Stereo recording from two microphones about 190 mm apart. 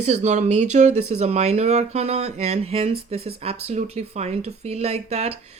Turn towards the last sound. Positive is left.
turn(degrees=-35)  # may be behind; listen again after turning